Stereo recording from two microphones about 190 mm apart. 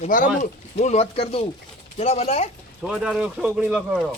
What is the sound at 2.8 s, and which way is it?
Speech, 5° right (ahead or behind).